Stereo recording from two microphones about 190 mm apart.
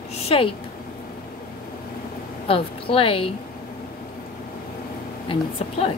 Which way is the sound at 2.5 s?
30° left (ahead or behind).